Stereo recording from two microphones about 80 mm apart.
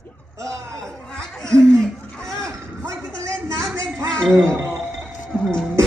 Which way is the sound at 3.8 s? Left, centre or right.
Right.